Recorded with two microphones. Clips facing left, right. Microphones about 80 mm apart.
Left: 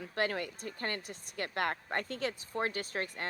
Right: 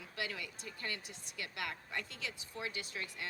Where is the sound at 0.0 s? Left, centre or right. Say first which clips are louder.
Left 9 dB; left.